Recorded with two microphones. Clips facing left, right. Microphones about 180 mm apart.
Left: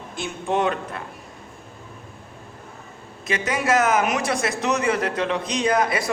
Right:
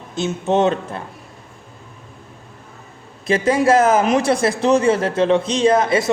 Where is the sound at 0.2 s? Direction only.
25° right (ahead or behind).